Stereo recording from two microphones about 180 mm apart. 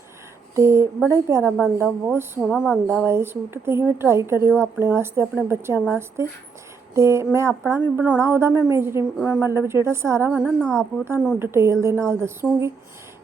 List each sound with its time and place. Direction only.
0.5 s a woman's voice: 15° right (ahead or behind)
10.6 s speech: 5° left (ahead or behind)
11.0 s a woman's voice: 10° right (ahead or behind)